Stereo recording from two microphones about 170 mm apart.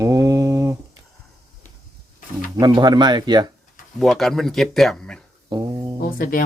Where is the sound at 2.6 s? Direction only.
25° right (ahead or behind).